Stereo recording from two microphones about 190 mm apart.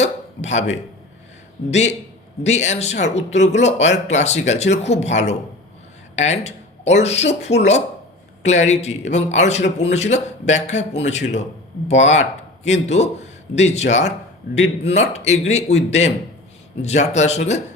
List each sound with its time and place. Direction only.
0.0 s hiccup: 35° left (ahead or behind)
1.7 s speech: 35° left (ahead or behind)